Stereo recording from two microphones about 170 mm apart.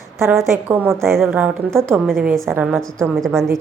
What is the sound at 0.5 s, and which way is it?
A woman's voice, 15° right (ahead or behind).